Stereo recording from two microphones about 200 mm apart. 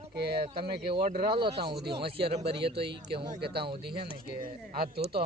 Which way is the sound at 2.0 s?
25° right (ahead or behind).